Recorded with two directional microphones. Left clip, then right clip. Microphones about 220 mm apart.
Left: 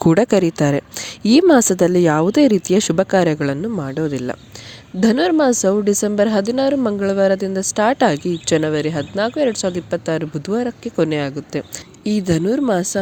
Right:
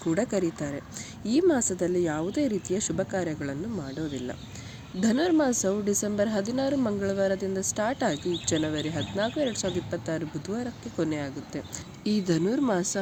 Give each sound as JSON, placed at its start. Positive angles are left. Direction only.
{"t": 0.1, "sound": "a woman's voice", "side_deg": 50}